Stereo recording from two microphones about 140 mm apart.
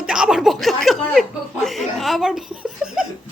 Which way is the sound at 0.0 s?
5° right (ahead or behind).